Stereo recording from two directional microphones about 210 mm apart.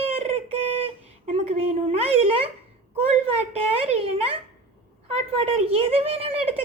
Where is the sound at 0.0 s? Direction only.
30° right (ahead or behind).